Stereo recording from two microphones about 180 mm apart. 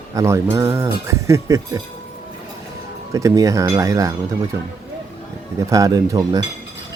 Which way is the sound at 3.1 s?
15° right (ahead or behind).